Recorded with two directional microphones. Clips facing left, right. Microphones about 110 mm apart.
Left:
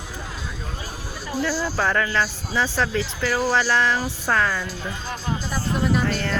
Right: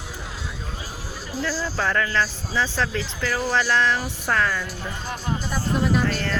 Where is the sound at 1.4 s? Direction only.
25° left (ahead or behind).